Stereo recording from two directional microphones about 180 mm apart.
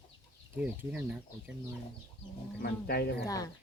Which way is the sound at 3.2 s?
20° left (ahead or behind).